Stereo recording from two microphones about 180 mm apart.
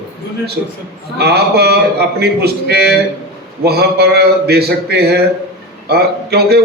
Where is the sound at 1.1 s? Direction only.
65° right (ahead or behind).